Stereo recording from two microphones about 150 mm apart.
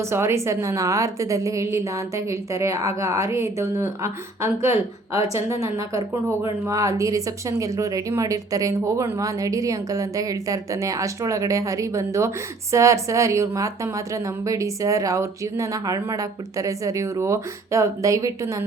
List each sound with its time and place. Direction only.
0.0 s speech: 15° right (ahead or behind)